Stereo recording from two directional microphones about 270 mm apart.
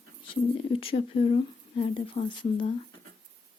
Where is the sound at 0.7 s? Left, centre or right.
Centre.